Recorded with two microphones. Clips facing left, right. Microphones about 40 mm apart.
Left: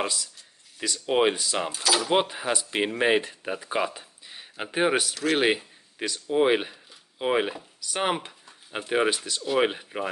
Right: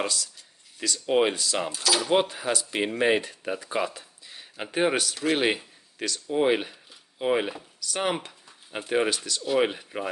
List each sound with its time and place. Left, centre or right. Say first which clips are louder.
0.0 s speech: even; centre
9.4 s speech: even; centre